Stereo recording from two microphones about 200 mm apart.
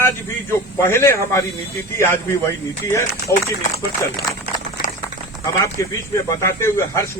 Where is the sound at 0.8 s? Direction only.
15° left (ahead or behind).